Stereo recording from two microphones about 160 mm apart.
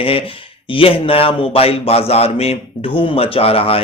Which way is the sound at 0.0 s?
35° left (ahead or behind).